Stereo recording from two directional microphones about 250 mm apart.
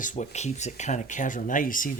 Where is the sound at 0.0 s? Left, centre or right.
Left.